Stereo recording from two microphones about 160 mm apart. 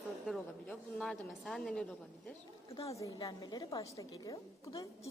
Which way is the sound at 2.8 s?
20° left (ahead or behind).